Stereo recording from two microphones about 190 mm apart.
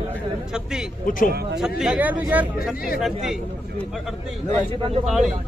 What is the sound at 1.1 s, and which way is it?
Speech, 45° left (ahead or behind).